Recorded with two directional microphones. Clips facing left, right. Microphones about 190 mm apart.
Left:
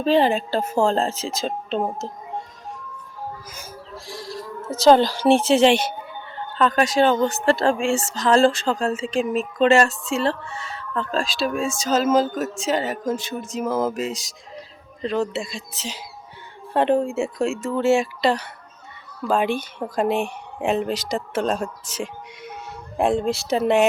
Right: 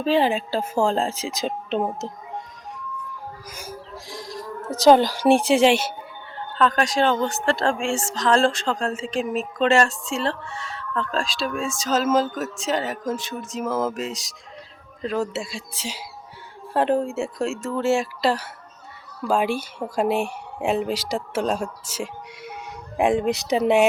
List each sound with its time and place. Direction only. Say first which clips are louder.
0.0 s speech: left 2 dB; 5° right (ahead or behind)
3.5 s a sound: right 1 dB; 10° right (ahead or behind)
4.8 s speech: even; 15° right (ahead or behind)
6.6 s a woman's voice: left 2 dB; 5° left (ahead or behind); by 23.6 s 15° right (ahead or behind)